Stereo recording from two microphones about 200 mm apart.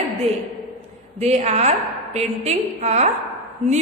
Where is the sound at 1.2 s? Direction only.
35° right (ahead or behind).